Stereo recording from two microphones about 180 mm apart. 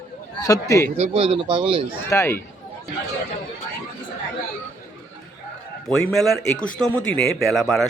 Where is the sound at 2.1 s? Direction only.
15° left (ahead or behind).